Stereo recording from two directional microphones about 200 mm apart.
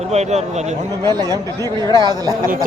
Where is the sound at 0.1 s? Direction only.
35° right (ahead or behind).